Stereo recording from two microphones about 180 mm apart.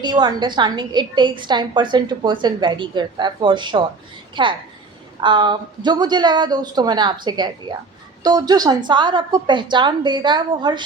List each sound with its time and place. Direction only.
0.0 s a woman's voice: 25° right (ahead or behind)